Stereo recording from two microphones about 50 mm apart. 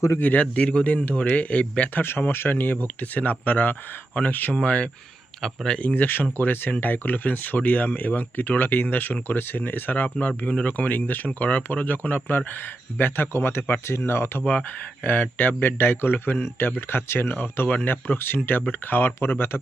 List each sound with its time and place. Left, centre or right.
0.2 s speech: left
0.5 s speech: centre
2.0 s speech: left
4.6 s speech: left
5.8 s a man's voice: left
13.8 s speech: left
15.0 s a man's voice: left